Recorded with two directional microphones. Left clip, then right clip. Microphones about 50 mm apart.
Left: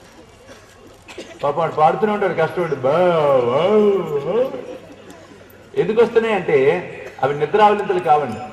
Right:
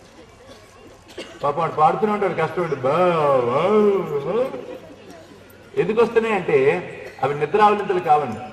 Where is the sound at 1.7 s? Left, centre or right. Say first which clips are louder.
Left 2 dB; left.